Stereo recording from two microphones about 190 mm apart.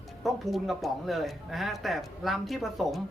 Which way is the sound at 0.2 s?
Centre (ahead or behind).